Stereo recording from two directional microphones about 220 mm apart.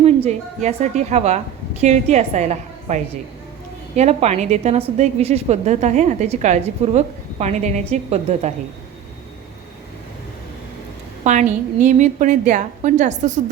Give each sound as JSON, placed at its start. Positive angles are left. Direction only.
{"t": 0.0, "sound": "a woman's voice", "side_deg": -30}
{"t": 11.2, "sound": "a woman's voice", "side_deg": -35}